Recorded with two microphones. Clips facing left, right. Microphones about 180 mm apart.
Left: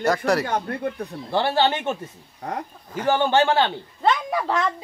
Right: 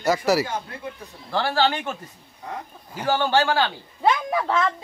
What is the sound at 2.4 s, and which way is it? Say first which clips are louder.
Speech: left 4 dB; 60° left (ahead or behind).